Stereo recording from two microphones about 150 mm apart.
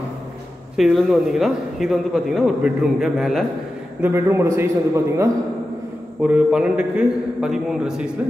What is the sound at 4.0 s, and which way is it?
A man's voice, 15° right (ahead or behind).